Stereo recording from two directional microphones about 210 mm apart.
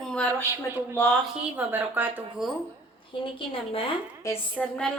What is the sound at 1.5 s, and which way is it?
Speech, 10° right (ahead or behind).